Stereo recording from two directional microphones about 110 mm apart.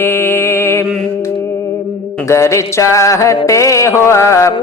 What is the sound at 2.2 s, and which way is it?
Music, 25° left (ahead or behind).